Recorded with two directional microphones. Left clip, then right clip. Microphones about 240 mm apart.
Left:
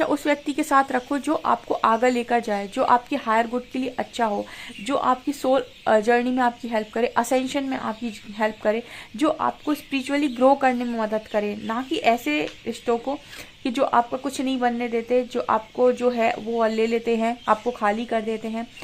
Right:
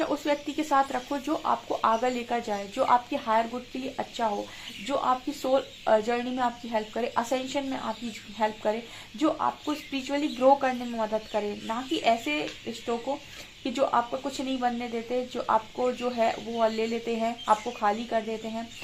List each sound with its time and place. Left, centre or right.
0.0 s speech: left